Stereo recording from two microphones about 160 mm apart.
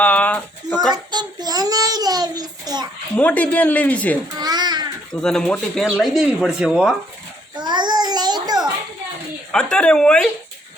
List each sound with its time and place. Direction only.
0.0 s a sound: 10° left (ahead or behind)
0.7 s child singing: centre (ahead or behind)
1.1 s child singing: 25° right (ahead or behind)
3.2 s speech: 10° left (ahead or behind)
4.4 s babbling: 25° right (ahead or behind)
5.2 s speech: 5° left (ahead or behind)
7.5 s babbling: 25° right (ahead or behind)
9.5 s speech: 5° left (ahead or behind)